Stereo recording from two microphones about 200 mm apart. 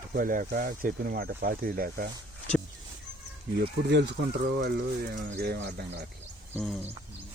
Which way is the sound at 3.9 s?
60° right (ahead or behind).